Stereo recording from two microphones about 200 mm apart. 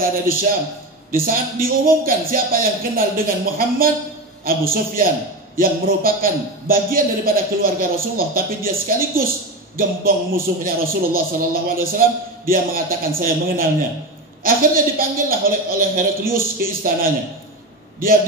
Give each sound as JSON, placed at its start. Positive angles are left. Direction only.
{"t": 0.0, "sound": "speech", "side_deg": -45}